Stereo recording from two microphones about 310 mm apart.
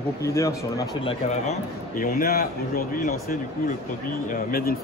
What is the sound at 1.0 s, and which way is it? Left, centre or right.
Speech, left.